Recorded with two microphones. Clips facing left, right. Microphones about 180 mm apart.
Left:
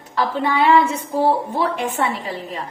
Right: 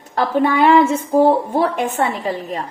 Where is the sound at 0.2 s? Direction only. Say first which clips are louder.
Right 4 dB; 50° right (ahead or behind).